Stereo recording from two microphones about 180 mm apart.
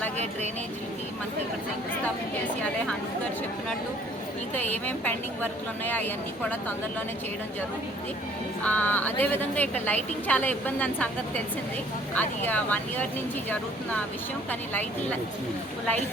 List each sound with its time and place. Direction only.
4.5 s a woman's voice: 10° left (ahead or behind)
8.6 s a woman's voice: 10° left (ahead or behind)
14.7 s a woman's voice: 10° left (ahead or behind)